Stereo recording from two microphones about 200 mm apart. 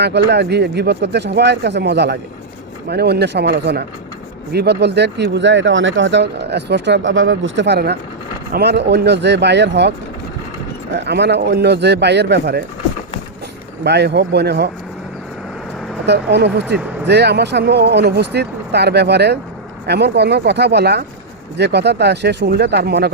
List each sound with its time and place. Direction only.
0.0 s speech: 60° right (ahead or behind)
11.0 s speech: 60° right (ahead or behind)
13.8 s speech: 55° right (ahead or behind)
16.0 s speech: 60° right (ahead or behind)